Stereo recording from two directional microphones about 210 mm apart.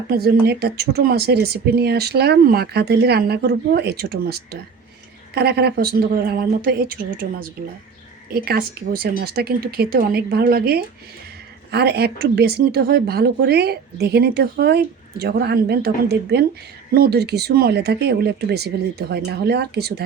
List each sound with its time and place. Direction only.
0.1 s a woman's voice: 45° right (ahead or behind)